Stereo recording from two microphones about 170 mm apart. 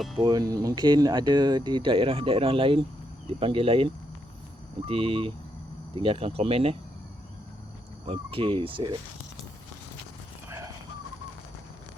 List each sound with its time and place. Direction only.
0.2 s speech: 25° right (ahead or behind)
4.9 s speech: 30° right (ahead or behind)
8.0 s speech: 30° right (ahead or behind)